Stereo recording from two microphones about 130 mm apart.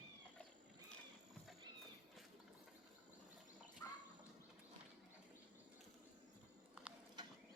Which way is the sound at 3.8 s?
25° left (ahead or behind).